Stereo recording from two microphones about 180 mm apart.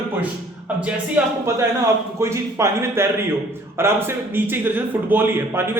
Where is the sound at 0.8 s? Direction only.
10° right (ahead or behind).